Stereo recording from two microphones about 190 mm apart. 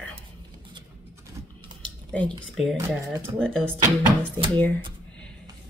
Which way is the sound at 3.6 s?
10° right (ahead or behind).